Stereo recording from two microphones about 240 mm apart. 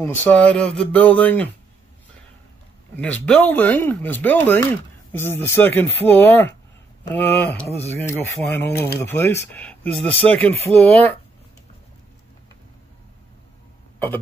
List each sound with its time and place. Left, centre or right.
0.0 s speech: centre
3.0 s speech: centre
10.5 s speech: right
13.9 s hiccup: centre